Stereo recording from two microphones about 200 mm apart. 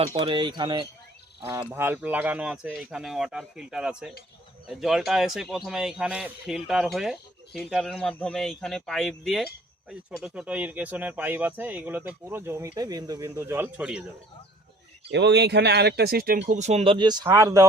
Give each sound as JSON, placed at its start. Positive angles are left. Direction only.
{"t": 0.2, "sound": "a man's voice", "side_deg": -25}
{"t": 15.1, "sound": "speech", "side_deg": -60}